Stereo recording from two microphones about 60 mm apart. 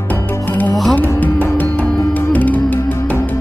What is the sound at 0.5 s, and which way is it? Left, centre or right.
Music, left.